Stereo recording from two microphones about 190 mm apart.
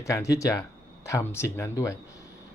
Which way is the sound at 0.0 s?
15° left (ahead or behind).